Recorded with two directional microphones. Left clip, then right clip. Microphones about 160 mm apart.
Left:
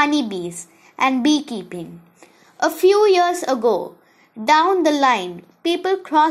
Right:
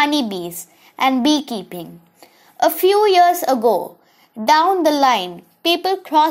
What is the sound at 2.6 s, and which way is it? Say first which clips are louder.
A woman's voice: right 1 dB; 35° right (ahead or behind).